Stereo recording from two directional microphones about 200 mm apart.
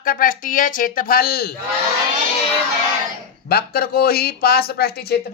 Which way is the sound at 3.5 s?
50° left (ahead or behind).